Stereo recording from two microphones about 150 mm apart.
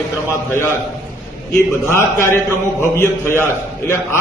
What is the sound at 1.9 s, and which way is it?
A man's voice, 15° left (ahead or behind).